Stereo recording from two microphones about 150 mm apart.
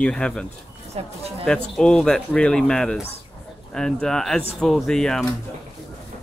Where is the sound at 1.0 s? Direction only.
45° right (ahead or behind).